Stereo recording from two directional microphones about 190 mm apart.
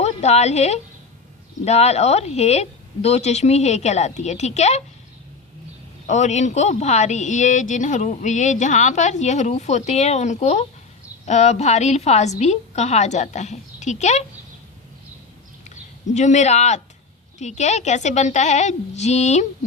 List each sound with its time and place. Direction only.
0.0 s a woman's voice: 35° left (ahead or behind)
6.1 s a woman's voice: 35° left (ahead or behind)
15.7 s a woman's voice: 40° left (ahead or behind)